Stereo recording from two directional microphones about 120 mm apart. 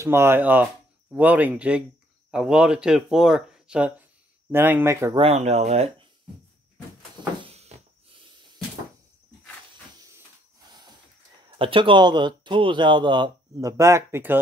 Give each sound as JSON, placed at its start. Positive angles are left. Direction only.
{"t": 0.0, "sound": "speech", "side_deg": -20}
{"t": 5.1, "sound": "speech", "side_deg": -55}
{"t": 7.4, "sound": "a sound", "side_deg": -60}
{"t": 11.5, "sound": "speech", "side_deg": -45}
{"t": 13.6, "sound": "speech", "side_deg": -25}